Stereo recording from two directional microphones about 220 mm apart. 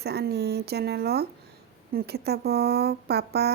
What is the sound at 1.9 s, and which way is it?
Speech, 45° right (ahead or behind).